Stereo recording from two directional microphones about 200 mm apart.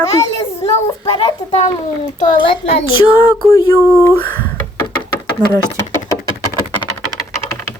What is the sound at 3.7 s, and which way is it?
Speech, 15° right (ahead or behind).